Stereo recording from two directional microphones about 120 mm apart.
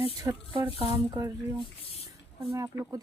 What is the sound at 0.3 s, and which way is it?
Speech, 25° right (ahead or behind).